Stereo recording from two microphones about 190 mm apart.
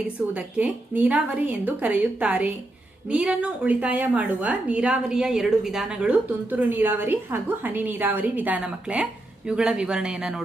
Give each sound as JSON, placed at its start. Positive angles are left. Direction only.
{"t": 0.3, "sound": "a woman's voice", "side_deg": -5}